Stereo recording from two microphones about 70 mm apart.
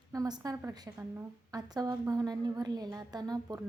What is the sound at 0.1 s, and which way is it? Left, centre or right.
Speech, right.